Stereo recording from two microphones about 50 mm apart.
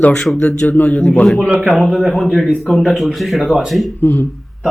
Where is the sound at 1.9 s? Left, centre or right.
Centre.